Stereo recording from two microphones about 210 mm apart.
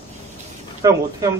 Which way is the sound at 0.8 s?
20° right (ahead or behind).